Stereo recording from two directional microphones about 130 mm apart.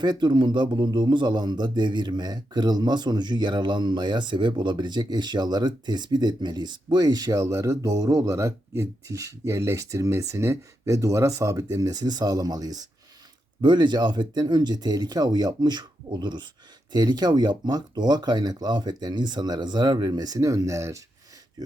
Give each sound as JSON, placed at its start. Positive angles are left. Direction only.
{"t": 0.0, "sound": "speech", "side_deg": -35}